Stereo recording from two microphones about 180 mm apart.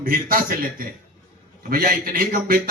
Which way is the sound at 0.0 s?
50° right (ahead or behind).